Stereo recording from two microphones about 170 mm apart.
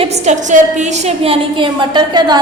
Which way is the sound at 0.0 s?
45° right (ahead or behind).